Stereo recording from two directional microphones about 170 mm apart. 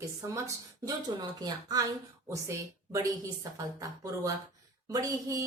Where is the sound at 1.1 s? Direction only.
25° right (ahead or behind).